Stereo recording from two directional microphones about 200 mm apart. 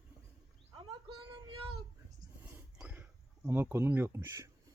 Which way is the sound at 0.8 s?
25° right (ahead or behind).